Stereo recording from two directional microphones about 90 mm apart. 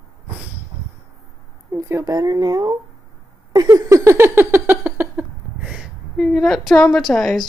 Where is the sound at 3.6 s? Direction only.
40° right (ahead or behind); by 5.8 s 20° right (ahead or behind).